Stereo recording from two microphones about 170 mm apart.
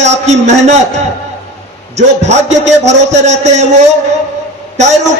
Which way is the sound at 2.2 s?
40° right (ahead or behind).